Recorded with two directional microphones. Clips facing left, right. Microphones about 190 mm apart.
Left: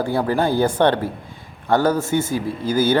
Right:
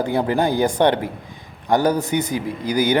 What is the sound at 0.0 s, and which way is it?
A man's voice, 20° right (ahead or behind).